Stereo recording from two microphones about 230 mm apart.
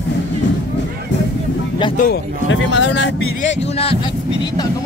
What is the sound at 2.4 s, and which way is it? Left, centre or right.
Speech, left.